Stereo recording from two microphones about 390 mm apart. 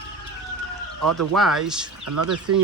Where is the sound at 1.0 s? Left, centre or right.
Right.